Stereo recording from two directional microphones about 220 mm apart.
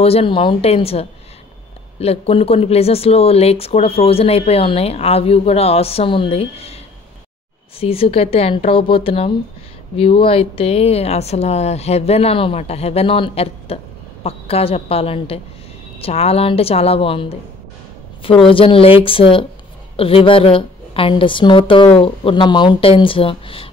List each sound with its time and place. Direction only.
0.0 s speech: 25° left (ahead or behind)
7.8 s speech: 25° left (ahead or behind)